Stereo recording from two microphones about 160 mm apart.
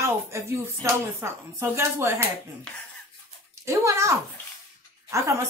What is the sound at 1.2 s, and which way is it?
Speech, 15° right (ahead or behind).